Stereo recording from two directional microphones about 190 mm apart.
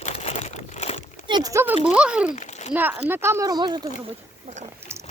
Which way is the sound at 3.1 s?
15° right (ahead or behind).